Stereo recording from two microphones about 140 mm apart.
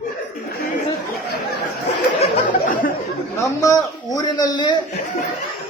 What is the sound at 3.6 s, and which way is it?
A man's voice, 25° left (ahead or behind).